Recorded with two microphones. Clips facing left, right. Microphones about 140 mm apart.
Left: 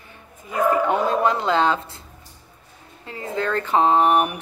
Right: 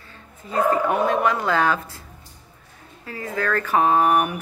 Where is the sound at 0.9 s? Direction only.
30° left (ahead or behind).